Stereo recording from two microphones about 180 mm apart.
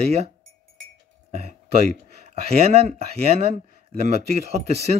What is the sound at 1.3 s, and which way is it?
Speech, 35° right (ahead or behind).